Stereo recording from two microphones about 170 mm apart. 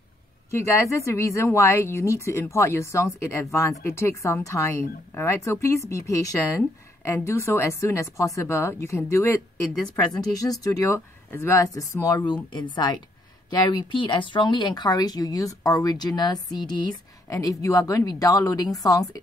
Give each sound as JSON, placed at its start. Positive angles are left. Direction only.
{"t": 0.7, "sound": "speech", "side_deg": 15}
{"t": 10.4, "sound": "speech", "side_deg": 20}